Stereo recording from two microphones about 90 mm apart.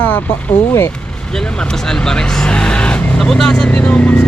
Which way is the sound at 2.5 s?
10° left (ahead or behind).